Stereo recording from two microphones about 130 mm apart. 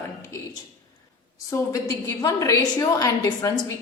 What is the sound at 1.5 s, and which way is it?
A woman's voice, 25° left (ahead or behind).